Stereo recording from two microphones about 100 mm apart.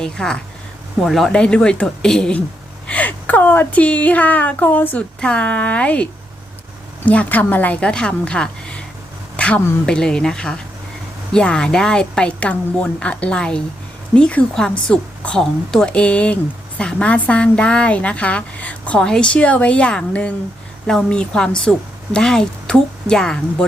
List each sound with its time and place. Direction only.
0.0 s a woman's voice: 5° left (ahead or behind)
9.3 s a sound: 10° left (ahead or behind)
9.8 s a woman's voice: 5° left (ahead or behind)